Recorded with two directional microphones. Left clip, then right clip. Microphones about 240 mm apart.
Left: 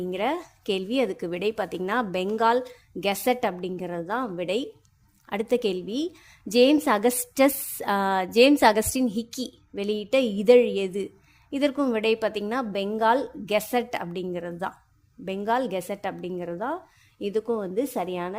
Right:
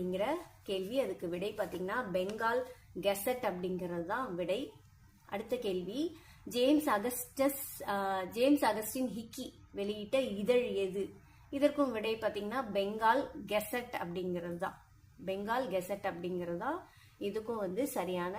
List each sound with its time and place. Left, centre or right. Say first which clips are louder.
0.1 s a woman's voice: left 9 dB; left